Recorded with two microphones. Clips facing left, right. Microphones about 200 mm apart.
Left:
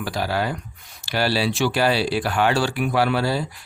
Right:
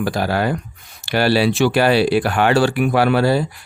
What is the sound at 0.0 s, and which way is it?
Speech, 50° right (ahead or behind).